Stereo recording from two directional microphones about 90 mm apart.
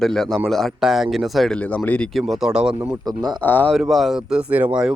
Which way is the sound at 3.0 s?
45° right (ahead or behind).